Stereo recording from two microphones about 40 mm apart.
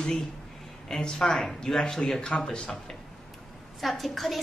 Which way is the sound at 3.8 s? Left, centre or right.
Centre.